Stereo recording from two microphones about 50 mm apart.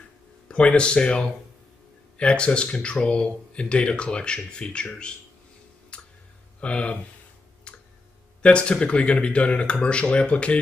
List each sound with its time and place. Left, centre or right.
0.5 s speech: left
5.9 s tick: left
6.6 s speech: left
7.7 s tick: left
8.4 s speech: centre